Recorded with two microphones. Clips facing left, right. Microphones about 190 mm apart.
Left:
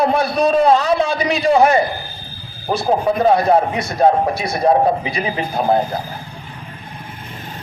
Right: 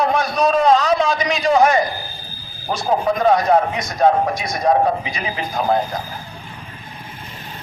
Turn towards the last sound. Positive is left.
turn(degrees=30)  # may be behind; listen again after turning